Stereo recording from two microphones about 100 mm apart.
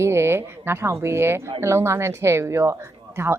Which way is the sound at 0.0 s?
25° right (ahead or behind).